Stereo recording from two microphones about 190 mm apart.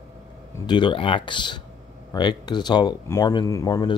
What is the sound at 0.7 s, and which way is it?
Speech, 25° left (ahead or behind).